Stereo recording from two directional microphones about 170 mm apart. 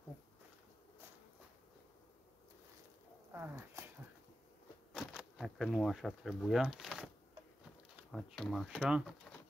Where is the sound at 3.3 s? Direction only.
15° right (ahead or behind).